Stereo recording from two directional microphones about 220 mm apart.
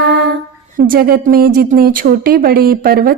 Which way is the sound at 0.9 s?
45° right (ahead or behind).